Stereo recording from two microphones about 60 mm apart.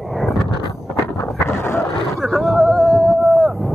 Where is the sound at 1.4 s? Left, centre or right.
Left.